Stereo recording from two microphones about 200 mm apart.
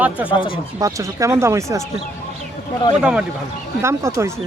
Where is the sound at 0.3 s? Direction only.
25° left (ahead or behind).